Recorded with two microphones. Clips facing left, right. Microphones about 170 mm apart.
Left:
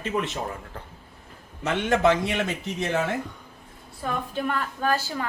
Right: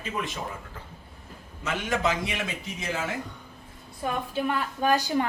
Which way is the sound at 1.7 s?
65° left (ahead or behind).